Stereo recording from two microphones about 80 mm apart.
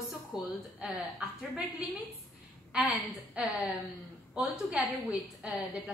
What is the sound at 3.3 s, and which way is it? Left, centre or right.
Speech, right.